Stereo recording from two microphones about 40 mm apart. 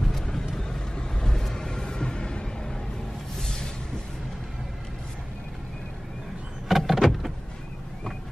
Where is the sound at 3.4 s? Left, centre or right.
Centre.